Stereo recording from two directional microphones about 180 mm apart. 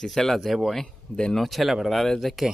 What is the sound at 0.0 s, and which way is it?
Speech, centre (ahead or behind).